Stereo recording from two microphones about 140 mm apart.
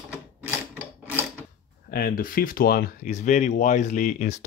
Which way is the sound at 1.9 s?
90° left.